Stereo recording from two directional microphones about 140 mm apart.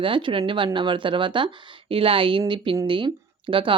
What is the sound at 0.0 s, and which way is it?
Speech, 35° right (ahead or behind).